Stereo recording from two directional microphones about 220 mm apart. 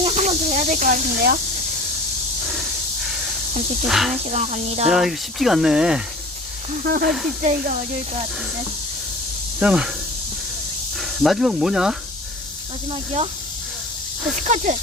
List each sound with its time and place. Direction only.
0.0 s speech: 30° right (ahead or behind)
3.8 s speech: centre (ahead or behind)
4.3 s speech: 30° right (ahead or behind)
4.9 s speech: centre (ahead or behind)
6.8 s speech: 40° right (ahead or behind)
9.6 s speech: 5° right (ahead or behind)
10.9 s speech: centre (ahead or behind)
14.4 s speech: 30° right (ahead or behind)